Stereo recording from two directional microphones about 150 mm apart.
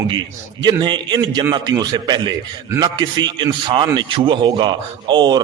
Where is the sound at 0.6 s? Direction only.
30° right (ahead or behind).